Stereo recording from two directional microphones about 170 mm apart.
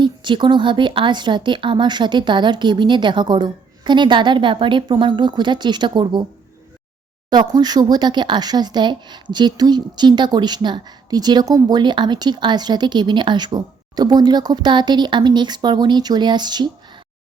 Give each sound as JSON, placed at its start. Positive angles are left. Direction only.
{"t": 0.0, "sound": "speech", "side_deg": -25}
{"t": 7.3, "sound": "speech", "side_deg": -25}